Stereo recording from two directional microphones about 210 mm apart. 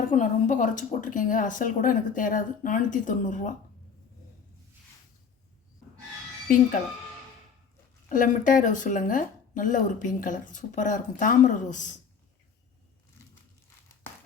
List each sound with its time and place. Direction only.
0.1 s a woman's voice: 35° left (ahead or behind)
8.1 s a woman's voice: 40° left (ahead or behind)